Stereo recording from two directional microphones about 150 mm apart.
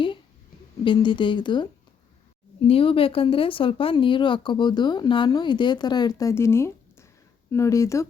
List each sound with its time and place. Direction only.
0.9 s speech: 30° left (ahead or behind)
2.6 s speech: 40° left (ahead or behind); by 8.0 s 20° left (ahead or behind)